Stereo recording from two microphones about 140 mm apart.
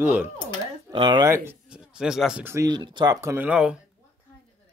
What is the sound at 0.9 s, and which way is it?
Speech, 35° right (ahead or behind).